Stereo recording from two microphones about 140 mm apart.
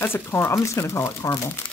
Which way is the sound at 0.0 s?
15° left (ahead or behind).